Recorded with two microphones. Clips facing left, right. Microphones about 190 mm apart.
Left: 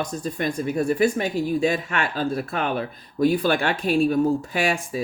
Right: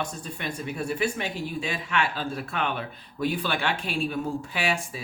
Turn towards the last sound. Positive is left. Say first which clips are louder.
# left 5 dB
turn(degrees=45)  # may be behind; listen again after turning